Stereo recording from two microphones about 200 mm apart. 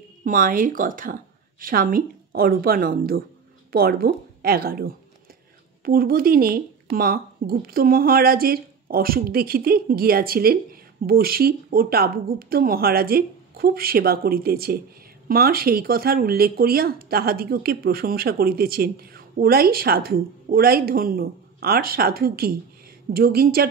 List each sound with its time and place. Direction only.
0.2 s speech: 45° right (ahead or behind)